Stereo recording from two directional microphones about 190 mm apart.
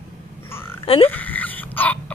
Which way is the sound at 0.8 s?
30° left (ahead or behind).